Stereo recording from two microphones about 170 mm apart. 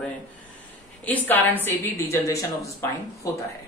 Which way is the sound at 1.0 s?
10° left (ahead or behind).